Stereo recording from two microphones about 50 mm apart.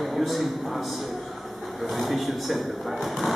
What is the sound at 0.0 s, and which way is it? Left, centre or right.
A man's voice, centre.